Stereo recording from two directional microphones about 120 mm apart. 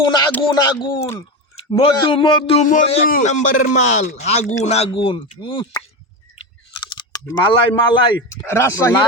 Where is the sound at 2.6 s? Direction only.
75° left (ahead or behind).